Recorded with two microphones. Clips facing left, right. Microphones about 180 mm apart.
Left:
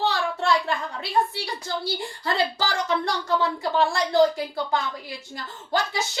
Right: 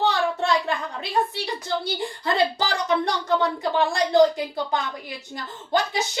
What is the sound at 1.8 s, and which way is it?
Speech, 20° right (ahead or behind).